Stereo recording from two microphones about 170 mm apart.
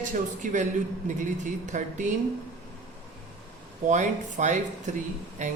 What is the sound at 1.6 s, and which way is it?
Speech, 45° right (ahead or behind).